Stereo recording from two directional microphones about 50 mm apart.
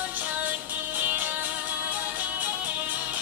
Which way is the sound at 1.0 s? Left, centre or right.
Right.